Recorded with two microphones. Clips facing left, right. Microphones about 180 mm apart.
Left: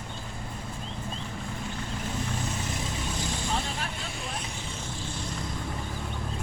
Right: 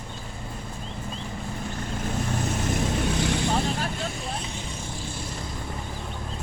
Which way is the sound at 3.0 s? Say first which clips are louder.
Right 8 dB; 70° right (ahead or behind).